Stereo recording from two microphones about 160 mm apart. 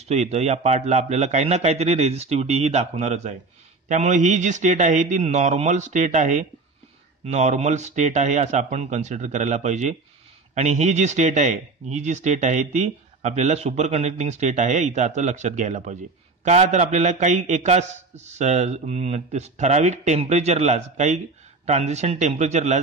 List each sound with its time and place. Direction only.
0.0 s speech: 45° right (ahead or behind)